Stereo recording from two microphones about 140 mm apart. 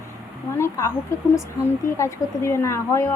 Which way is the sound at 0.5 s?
20° left (ahead or behind).